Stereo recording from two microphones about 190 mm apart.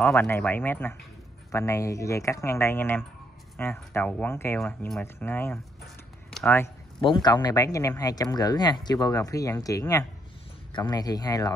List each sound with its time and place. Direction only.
0.1 s speech: 10° left (ahead or behind)
4.6 s speech: centre (ahead or behind)
7.0 s speech: 25° left (ahead or behind)